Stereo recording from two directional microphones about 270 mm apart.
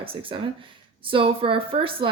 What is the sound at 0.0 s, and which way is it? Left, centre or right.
A woman's voice, centre.